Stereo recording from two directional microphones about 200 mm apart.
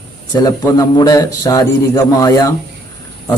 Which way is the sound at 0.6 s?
15° left (ahead or behind).